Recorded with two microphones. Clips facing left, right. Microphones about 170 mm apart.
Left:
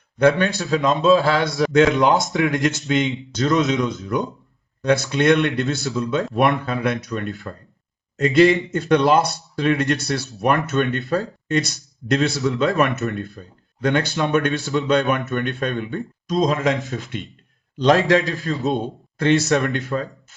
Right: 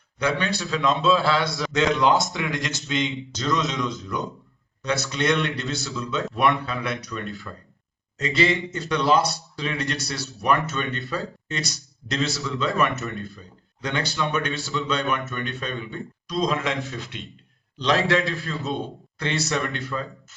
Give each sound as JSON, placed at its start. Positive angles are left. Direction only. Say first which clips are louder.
{"t": 0.2, "sound": "speech", "louder": "left 8 dB", "side_deg": 50}
{"t": 2.3, "sound": "speech", "louder": "left 9 dB", "side_deg": 40}
{"t": 3.3, "sound": "a man's voice", "louder": "left 7 dB", "side_deg": 55}
{"t": 11.1, "sound": "a man's voice", "louder": "left 9 dB", "side_deg": 50}
{"t": 14.2, "sound": "speech", "louder": "left 6 dB", "side_deg": 55}